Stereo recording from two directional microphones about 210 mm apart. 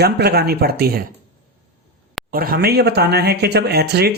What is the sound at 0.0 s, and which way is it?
Speech, 50° right (ahead or behind).